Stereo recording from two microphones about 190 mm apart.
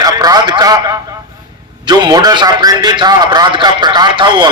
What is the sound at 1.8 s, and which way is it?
A man's voice, 20° right (ahead or behind).